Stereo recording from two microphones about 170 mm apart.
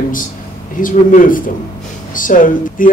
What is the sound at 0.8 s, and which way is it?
Speech, 55° left (ahead or behind).